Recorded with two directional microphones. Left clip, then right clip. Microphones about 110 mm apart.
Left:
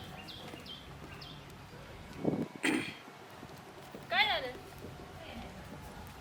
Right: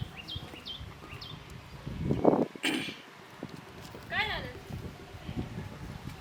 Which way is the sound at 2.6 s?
15° right (ahead or behind).